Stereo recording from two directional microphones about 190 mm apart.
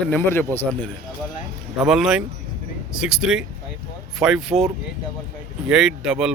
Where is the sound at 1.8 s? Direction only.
5° right (ahead or behind).